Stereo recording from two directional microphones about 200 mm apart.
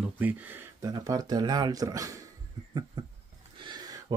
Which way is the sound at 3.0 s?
20° right (ahead or behind).